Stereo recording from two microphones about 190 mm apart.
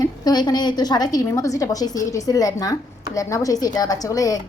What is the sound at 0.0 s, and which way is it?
A woman's voice, 20° left (ahead or behind).